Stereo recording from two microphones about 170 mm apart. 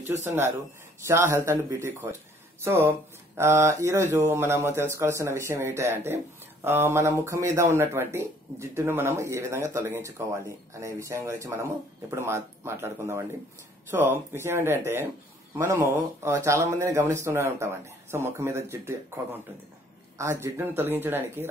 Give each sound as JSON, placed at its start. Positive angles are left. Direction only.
{"t": 0.2, "sound": "speech", "side_deg": -15}
{"t": 20.2, "sound": "speech", "side_deg": -15}